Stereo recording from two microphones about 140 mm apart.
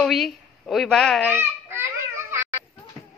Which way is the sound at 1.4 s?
15° right (ahead or behind).